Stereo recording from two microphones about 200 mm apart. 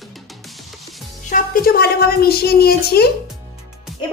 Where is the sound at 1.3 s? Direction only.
45° left (ahead or behind).